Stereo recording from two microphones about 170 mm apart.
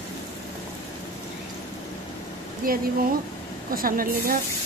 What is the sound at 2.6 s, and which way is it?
A woman's voice, 60° right (ahead or behind).